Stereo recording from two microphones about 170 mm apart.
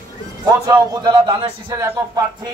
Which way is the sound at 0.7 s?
20° right (ahead or behind).